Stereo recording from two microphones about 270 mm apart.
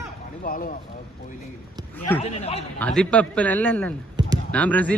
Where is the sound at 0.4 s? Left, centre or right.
Left.